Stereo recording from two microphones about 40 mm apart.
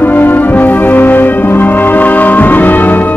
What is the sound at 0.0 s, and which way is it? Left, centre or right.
Music, left.